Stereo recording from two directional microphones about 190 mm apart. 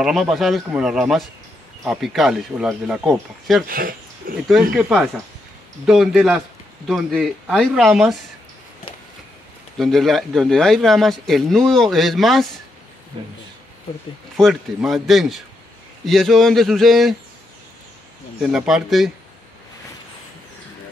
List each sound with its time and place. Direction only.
0.0 s speech: centre (ahead or behind)
3.6 s speech: 50° right (ahead or behind)
4.5 s speech: 5° right (ahead or behind)
9.8 s speech: centre (ahead or behind)
13.2 s speech: 25° right (ahead or behind)
14.3 s speech: centre (ahead or behind)
18.4 s speech: centre (ahead or behind)